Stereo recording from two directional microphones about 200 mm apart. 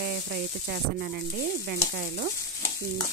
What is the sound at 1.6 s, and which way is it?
Stir, 55° right (ahead or behind).